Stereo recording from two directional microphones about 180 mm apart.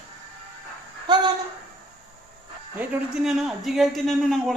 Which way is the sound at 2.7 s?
5° right (ahead or behind).